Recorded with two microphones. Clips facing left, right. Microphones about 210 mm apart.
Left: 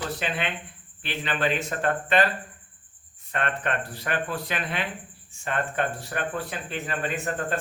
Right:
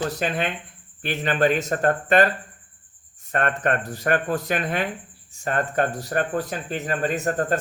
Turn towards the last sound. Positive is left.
turn(degrees=-40)  # may be behind; listen again after turning